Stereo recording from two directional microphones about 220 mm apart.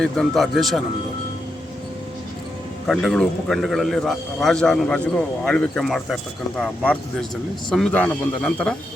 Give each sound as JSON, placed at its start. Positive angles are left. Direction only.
{"t": 0.0, "sound": "a man's voice", "side_deg": 0}
{"t": 2.8, "sound": "a man's voice", "side_deg": 0}